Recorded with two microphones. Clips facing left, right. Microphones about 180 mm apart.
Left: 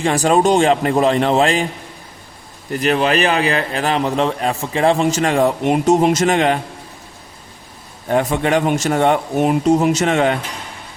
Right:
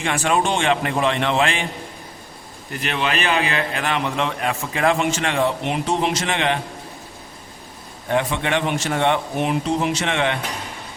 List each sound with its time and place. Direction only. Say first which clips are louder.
0.0 s a man's voice: left 6 dB; 35° left (ahead or behind)
2.7 s a man's voice: left 8 dB; 40° left (ahead or behind)
8.1 s a man's voice: left 5 dB; 45° left (ahead or behind)